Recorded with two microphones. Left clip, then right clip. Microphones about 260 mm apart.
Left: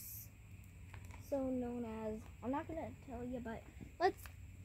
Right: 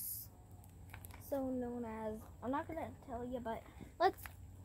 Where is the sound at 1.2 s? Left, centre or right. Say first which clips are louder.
Even; centre.